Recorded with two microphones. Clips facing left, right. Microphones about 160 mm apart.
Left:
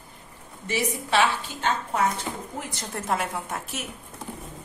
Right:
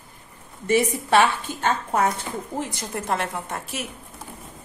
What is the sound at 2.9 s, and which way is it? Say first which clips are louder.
Speech: even; centre (ahead or behind).